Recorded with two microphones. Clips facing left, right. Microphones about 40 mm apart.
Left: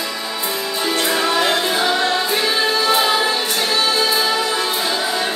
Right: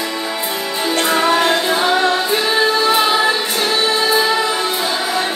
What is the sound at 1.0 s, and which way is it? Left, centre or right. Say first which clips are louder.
Music: right 4 dB; right.